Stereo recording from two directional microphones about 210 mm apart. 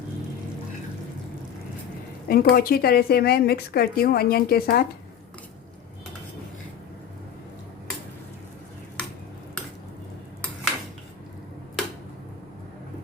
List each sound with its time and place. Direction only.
2.2 s a woman's voice: 45° left (ahead or behind)